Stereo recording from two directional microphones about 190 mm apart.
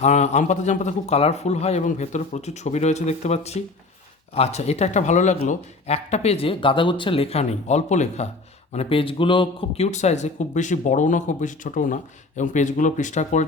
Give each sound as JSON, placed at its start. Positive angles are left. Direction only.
{"t": 0.0, "sound": "speech", "side_deg": 35}